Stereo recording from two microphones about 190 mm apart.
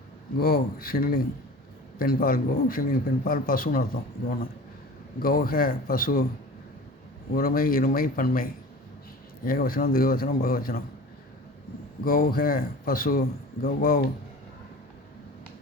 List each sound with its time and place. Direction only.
0.3 s speech: 55° left (ahead or behind)
5.2 s speech: 50° left (ahead or behind)
7.3 s speech: 50° left (ahead or behind)
12.0 s speech: 50° left (ahead or behind)